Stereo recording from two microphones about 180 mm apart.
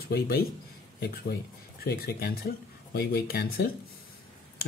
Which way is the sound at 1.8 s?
60° left (ahead or behind).